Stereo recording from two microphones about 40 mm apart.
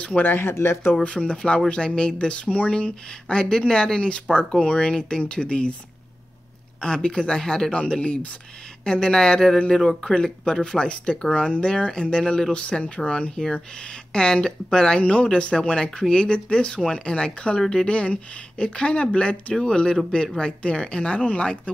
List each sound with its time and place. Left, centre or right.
0.4 s speech: left
1.0 s speech: left
6.8 s speech: centre
17.6 s speech: centre
17.8 s speech: left